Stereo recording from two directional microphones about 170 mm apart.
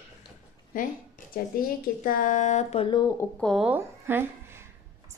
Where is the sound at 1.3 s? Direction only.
55° left (ahead or behind).